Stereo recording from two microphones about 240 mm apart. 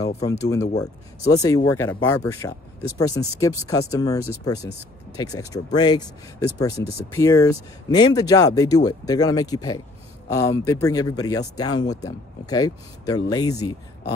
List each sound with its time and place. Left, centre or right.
0.2 s speech: centre